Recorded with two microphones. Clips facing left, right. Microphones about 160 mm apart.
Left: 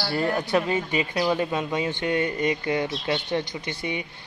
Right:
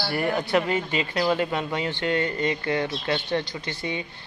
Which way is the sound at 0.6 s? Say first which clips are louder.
Left 1 dB; 15° left (ahead or behind).